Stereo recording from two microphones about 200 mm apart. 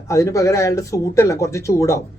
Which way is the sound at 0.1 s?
15° left (ahead or behind).